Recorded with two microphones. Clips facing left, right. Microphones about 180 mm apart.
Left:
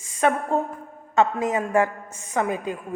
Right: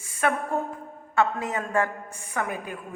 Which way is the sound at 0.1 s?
20° left (ahead or behind).